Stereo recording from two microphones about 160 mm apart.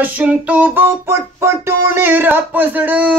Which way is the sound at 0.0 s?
10° right (ahead or behind).